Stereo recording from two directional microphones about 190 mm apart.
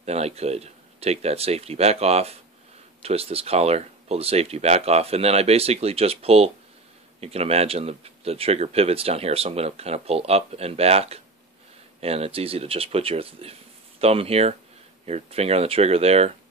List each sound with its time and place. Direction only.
0.0 s speech: 35° right (ahead or behind)